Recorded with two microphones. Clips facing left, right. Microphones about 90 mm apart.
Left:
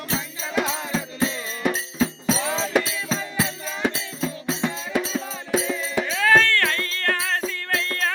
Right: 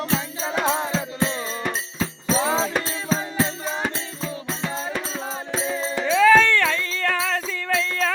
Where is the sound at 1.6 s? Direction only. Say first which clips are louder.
Left 4 dB; 10° left (ahead or behind).